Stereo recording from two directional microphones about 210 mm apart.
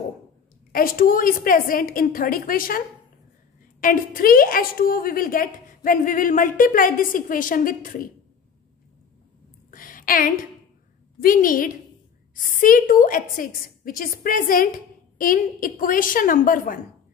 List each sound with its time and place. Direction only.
0.7 s a woman's voice: 40° left (ahead or behind)
3.8 s a woman's voice: 45° left (ahead or behind)
9.7 s a sound: 40° left (ahead or behind)
11.2 s a woman's voice: 40° left (ahead or behind)